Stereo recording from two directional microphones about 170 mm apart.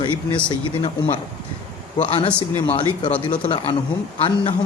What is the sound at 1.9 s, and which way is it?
Speech, 30° left (ahead or behind).